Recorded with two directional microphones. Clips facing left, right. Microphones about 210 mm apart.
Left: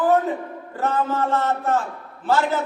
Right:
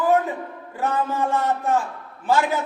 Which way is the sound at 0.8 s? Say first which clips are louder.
Left 1 dB; 15° right (ahead or behind).